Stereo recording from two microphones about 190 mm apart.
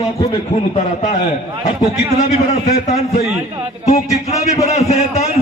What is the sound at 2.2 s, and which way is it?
Music, 35° left (ahead or behind).